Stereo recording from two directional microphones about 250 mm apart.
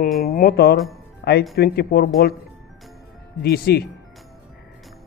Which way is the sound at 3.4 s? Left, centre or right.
Left.